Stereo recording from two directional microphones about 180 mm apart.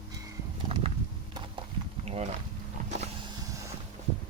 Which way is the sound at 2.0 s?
35° right (ahead or behind).